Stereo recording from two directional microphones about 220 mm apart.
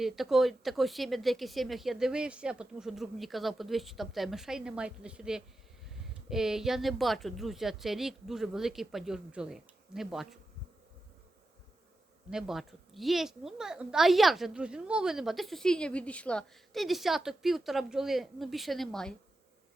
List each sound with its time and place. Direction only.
0.0 s a woman's voice: centre (ahead or behind)
12.3 s a woman's voice: centre (ahead or behind)